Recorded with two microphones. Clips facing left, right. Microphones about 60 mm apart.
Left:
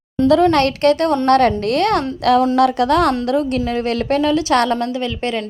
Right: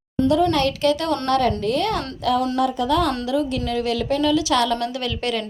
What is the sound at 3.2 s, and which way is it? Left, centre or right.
A woman's voice, left.